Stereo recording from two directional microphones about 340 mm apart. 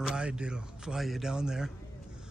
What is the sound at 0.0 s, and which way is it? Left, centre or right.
Speech, centre.